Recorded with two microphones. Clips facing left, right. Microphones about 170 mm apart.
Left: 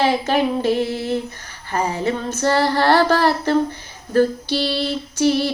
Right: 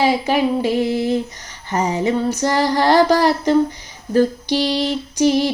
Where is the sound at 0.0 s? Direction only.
15° right (ahead or behind).